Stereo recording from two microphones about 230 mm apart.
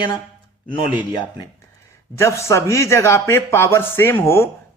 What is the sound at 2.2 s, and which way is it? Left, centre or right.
Speech, centre.